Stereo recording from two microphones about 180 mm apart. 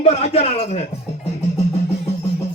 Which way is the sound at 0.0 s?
35° left (ahead or behind).